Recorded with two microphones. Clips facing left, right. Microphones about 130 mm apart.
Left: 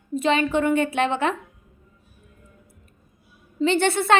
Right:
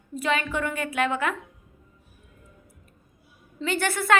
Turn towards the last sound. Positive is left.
turn(degrees=25)  # may be behind; listen again after turning